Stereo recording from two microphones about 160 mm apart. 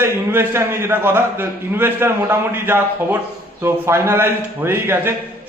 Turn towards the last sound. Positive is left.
turn(degrees=-15)  # may be behind; listen again after turning